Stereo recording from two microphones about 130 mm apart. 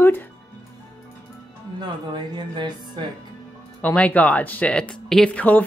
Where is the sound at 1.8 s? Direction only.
35° right (ahead or behind).